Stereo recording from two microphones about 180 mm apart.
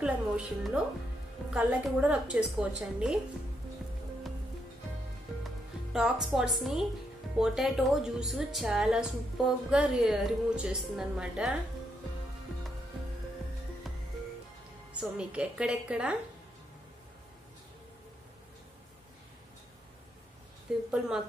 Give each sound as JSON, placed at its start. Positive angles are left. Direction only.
{"t": 0.0, "sound": "a woman's voice", "side_deg": -5}
{"t": 5.9, "sound": "a woman's voice", "side_deg": 0}
{"t": 13.9, "sound": "music", "side_deg": 0}
{"t": 15.0, "sound": "a woman's voice", "side_deg": -5}
{"t": 20.7, "sound": "a woman's voice", "side_deg": -5}